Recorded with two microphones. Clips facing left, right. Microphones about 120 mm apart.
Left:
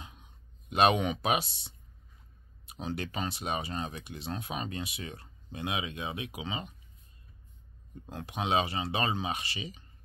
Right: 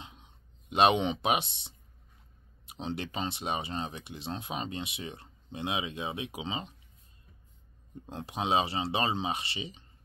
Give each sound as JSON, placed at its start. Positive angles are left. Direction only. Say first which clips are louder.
{"t": 0.0, "sound": "a sound", "louder": "right 1 dB", "side_deg": -25}
{"t": 2.6, "sound": "speech", "louder": "even", "side_deg": -25}
{"t": 8.1, "sound": "speech", "louder": "right 1 dB", "side_deg": -30}